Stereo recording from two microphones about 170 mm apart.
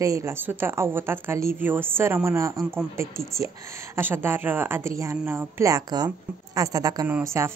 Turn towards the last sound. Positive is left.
turn(degrees=-15)  # may be behind; listen again after turning